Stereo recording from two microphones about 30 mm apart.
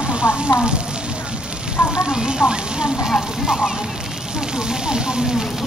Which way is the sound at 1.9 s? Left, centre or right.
Right.